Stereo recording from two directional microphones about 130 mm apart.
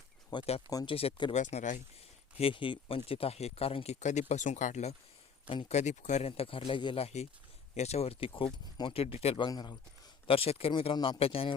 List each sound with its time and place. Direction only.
0.3 s speech: 35° left (ahead or behind)
0.9 s speech: 45° left (ahead or behind)
1.4 s speech: 65° left (ahead or behind)
2.4 s speech: 40° left (ahead or behind)
4.0 s speech: 60° left (ahead or behind)
9.4 s speech: 35° left (ahead or behind)
10.2 s speech: 45° left (ahead or behind)